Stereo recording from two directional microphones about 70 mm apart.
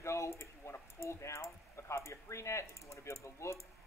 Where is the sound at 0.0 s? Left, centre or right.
Left.